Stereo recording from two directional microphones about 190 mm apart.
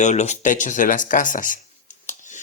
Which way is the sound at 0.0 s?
40° left (ahead or behind).